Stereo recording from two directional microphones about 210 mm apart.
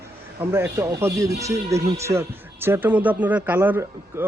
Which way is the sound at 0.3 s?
10° right (ahead or behind).